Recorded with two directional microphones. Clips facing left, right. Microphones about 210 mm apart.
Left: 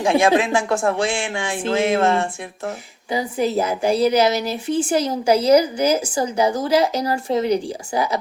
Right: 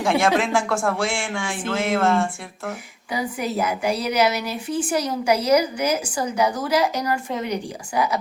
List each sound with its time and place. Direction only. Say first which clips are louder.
0.3 s speech: left 2 dB; 15° left (ahead or behind)